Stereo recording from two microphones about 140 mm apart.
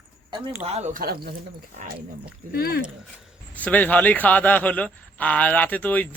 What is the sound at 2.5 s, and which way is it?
Speech, 90° left.